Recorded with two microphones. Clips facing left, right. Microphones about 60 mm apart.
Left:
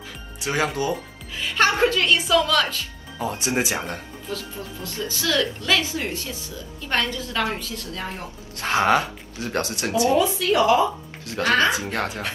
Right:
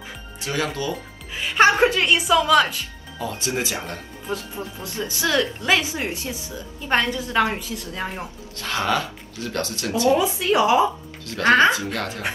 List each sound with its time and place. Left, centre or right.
0.5 s speech: left
1.3 s a woman's voice: right
3.2 s speech: left
4.3 s a woman's voice: right
8.5 s speech: left
10.1 s a woman's voice: right
11.7 s speech: left